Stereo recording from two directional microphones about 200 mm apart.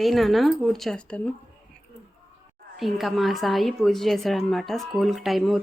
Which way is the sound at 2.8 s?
Centre (ahead or behind).